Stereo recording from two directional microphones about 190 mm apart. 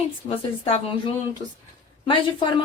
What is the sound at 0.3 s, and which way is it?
Speech, 30° left (ahead or behind).